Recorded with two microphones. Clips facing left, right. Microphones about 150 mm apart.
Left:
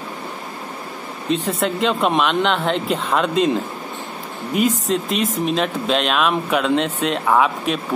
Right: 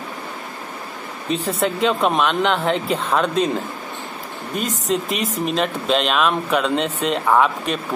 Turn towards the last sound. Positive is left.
turn(degrees=0)  # may be behind; listen again after turning